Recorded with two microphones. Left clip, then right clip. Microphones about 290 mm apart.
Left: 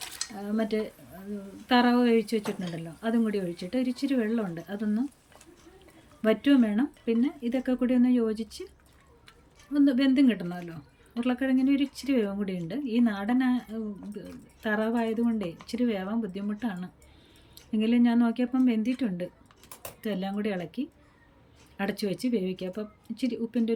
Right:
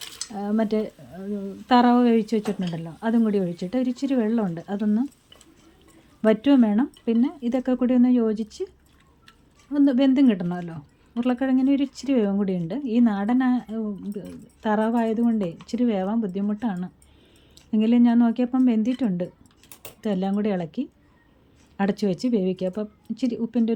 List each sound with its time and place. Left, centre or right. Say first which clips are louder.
0.3 s speech: right 6 dB; centre
6.2 s speech: right 5 dB; centre
9.7 s speech: right 4 dB; centre